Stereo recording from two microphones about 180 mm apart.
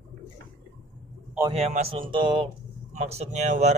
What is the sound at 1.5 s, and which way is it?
Speech, 35° right (ahead or behind).